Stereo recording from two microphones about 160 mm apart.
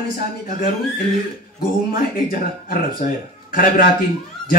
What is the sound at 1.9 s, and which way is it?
Speech, 60° left (ahead or behind).